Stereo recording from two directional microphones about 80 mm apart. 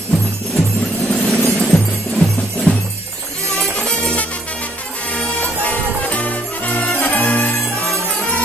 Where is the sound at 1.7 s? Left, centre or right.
Left.